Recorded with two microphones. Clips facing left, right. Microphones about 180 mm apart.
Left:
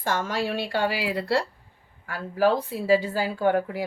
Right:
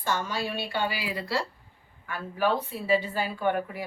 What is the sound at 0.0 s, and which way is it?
A woman's voice, 90° left.